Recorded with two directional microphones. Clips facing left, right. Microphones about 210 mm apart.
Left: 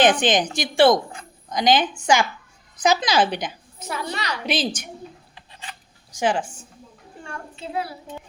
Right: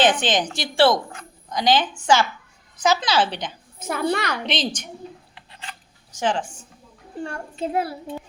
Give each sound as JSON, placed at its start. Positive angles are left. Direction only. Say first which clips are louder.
{"t": 0.0, "sound": "a woman's voice", "louder": "left 2 dB", "side_deg": 15}
{"t": 3.8, "sound": "a child's voice", "louder": "right 7 dB", "side_deg": -50}
{"t": 4.4, "sound": "a woman's voice", "louder": "left 2 dB", "side_deg": 5}
{"t": 6.1, "sound": "a woman's voice", "louder": "left 1 dB", "side_deg": 10}
{"t": 7.3, "sound": "a child's voice", "louder": "right 5 dB", "side_deg": -40}